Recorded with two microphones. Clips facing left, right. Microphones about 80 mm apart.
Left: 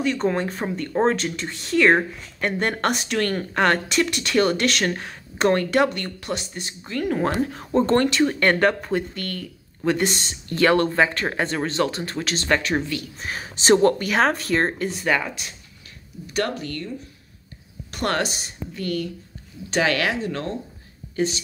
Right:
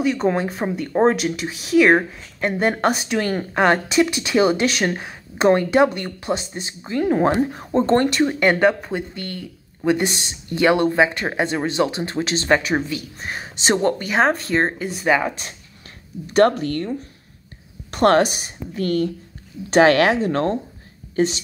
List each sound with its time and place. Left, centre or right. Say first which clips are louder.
0.0 s speech: right 3 dB; centre; by 8.1 s right
8.2 s speech: right 2 dB; centre
9.1 s speech: even; centre
13.2 s speech: right 2 dB; centre
16.3 s speech: right 10 dB; right
17.9 s speech: right 9 dB; right